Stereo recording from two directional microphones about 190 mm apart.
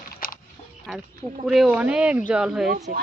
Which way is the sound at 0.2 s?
50° left (ahead or behind).